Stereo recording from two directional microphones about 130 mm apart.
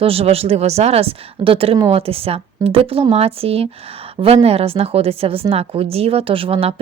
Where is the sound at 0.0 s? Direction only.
50° right (ahead or behind).